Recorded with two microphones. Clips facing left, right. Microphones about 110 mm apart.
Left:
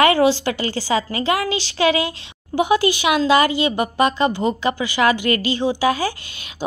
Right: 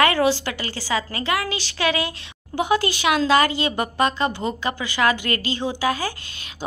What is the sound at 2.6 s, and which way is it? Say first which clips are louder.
A woman's voice: left 4 dB; 10° left (ahead or behind).